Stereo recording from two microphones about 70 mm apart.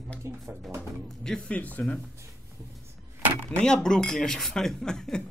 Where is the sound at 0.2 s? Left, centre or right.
Right.